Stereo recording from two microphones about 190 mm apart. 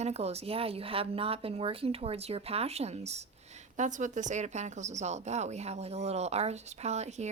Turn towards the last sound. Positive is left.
turn(degrees=-35)  # may be behind; listen again after turning